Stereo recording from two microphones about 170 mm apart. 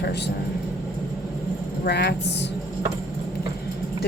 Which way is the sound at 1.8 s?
75° left (ahead or behind).